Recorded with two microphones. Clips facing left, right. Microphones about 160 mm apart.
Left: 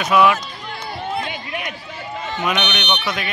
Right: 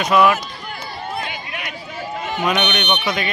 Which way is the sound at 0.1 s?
5° left (ahead or behind).